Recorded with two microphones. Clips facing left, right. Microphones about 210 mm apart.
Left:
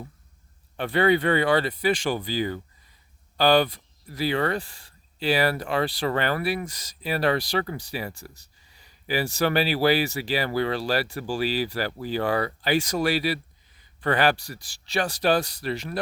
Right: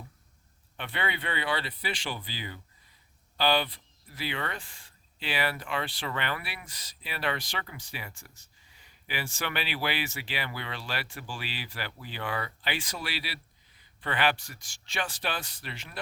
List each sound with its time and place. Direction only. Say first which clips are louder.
0.8 s speech: left 14 dB; 40° left (ahead or behind)